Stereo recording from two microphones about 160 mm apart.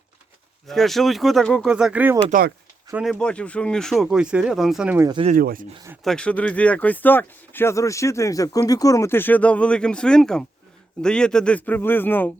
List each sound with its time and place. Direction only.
0.7 s speech: centre (ahead or behind)
1.7 s speech: 5° right (ahead or behind)
5.3 s speech: 60° right (ahead or behind)
6.1 s speech: 5° left (ahead or behind)